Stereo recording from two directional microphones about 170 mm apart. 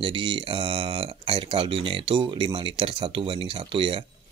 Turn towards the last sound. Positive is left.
turn(degrees=-30)  # may be behind; listen again after turning